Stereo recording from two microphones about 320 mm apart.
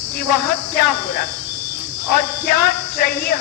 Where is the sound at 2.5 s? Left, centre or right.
Left.